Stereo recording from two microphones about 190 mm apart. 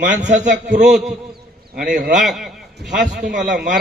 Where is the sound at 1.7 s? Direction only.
50° right (ahead or behind).